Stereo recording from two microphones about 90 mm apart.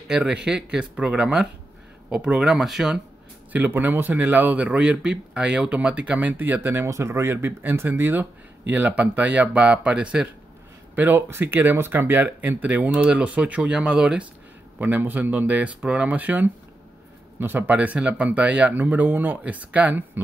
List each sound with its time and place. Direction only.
0.1 s speech: 10° right (ahead or behind)
3.5 s speech: 20° right (ahead or behind)
11.0 s speech: 25° right (ahead or behind)
14.8 s speech: 20° right (ahead or behind)